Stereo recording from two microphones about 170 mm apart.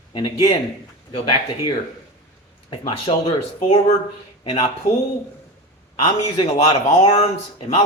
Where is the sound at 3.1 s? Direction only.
30° left (ahead or behind).